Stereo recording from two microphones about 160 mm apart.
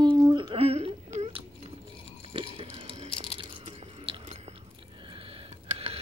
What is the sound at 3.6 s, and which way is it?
Biting, 35° right (ahead or behind).